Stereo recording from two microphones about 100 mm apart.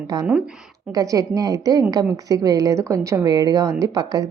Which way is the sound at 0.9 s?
35° right (ahead or behind).